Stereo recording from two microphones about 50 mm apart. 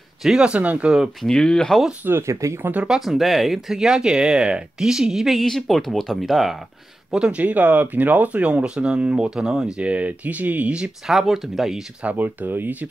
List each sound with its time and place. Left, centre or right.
0.4 s speech: right
1.2 s speech: centre
2.2 s speech: right
2.9 s speech: centre
5.4 s speech: centre
7.2 s speech: right; by 9.7 s centre
9.8 s speech: right
11.1 s speech: centre
12.0 s speech: right